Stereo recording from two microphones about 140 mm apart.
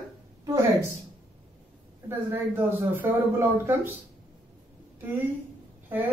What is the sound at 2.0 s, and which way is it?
Speech, 15° right (ahead or behind).